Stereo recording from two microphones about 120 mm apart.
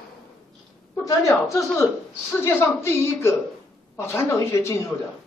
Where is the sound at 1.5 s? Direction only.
25° left (ahead or behind).